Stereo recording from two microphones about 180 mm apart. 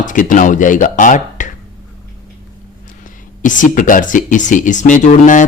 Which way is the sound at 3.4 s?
45° left (ahead or behind).